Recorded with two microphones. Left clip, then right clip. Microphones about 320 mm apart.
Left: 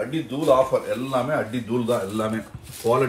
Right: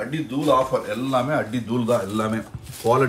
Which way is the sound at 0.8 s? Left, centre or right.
Centre.